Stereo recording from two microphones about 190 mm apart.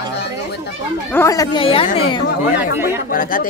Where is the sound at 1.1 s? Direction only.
15° left (ahead or behind).